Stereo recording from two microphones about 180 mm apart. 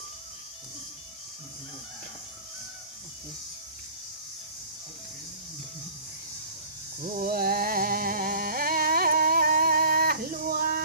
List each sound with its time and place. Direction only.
7.0 s music: 50° right (ahead or behind)